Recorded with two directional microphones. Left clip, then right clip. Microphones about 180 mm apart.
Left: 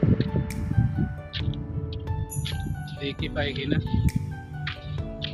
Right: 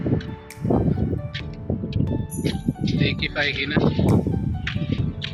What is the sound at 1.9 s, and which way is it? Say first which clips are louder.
Music: right 8 dB; 5° right (ahead or behind).